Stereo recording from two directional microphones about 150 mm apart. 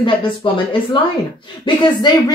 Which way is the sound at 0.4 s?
30° left (ahead or behind).